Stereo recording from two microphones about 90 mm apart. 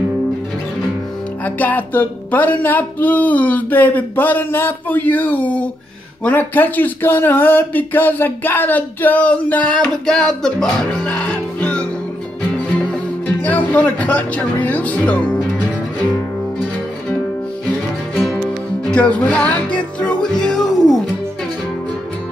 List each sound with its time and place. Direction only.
1.4 s speech: 20° left (ahead or behind)
11.1 s music: 15° left (ahead or behind)
13.4 s speech: 20° left (ahead or behind)
18.9 s music: 15° left (ahead or behind)